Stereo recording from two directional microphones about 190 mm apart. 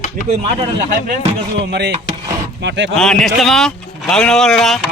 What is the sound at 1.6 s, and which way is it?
Speech, 60° right (ahead or behind).